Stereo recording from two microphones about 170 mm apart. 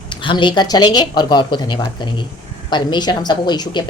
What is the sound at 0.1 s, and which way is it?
A woman's voice, 30° left (ahead or behind).